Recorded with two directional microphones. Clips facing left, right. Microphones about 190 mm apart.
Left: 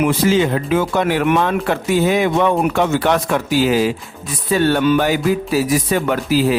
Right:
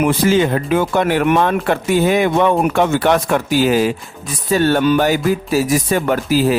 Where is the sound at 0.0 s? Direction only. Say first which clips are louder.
Right 1 dB; 50° right (ahead or behind).